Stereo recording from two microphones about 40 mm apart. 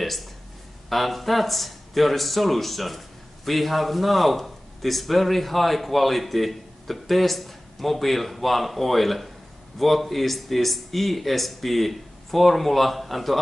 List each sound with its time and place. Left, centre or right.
0.0 s a man's voice: centre